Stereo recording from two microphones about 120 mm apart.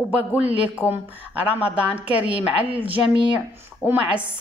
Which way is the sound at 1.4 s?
10° right (ahead or behind).